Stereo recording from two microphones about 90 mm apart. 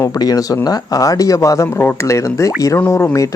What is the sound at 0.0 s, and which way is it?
Speech, 45° left (ahead or behind).